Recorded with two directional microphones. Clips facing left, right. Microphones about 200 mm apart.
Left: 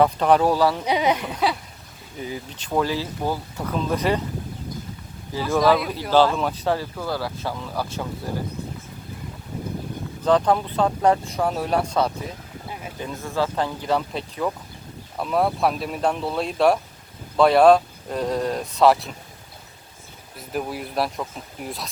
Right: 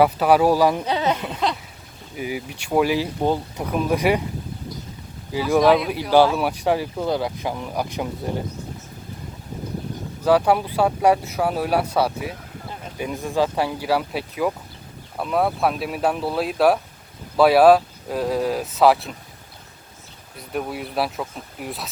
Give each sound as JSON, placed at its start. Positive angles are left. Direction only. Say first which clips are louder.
{"t": 0.0, "sound": "speech", "louder": "right 1 dB", "side_deg": -10}
{"t": 0.9, "sound": "a woman's voice", "louder": "left 1 dB", "side_deg": 15}
{"t": 2.1, "sound": "speech", "louder": "right 4 dB", "side_deg": -10}
{"t": 5.3, "sound": "speech", "louder": "right 3 dB", "side_deg": -15}
{"t": 10.2, "sound": "speech", "louder": "right 1 dB", "side_deg": -10}
{"t": 20.5, "sound": "speech", "louder": "right 1 dB", "side_deg": 0}